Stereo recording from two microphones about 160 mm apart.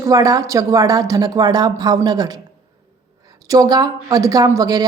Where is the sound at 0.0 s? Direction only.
20° right (ahead or behind).